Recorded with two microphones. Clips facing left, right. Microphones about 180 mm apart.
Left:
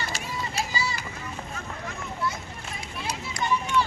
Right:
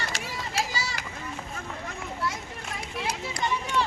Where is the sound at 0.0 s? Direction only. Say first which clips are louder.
Left 2 dB; 90° right.